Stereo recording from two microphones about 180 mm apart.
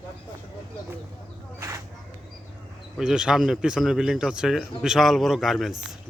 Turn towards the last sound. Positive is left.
turn(degrees=0)  # may be behind; listen again after turning